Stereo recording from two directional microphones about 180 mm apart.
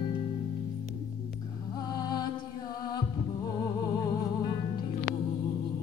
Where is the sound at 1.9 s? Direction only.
20° left (ahead or behind).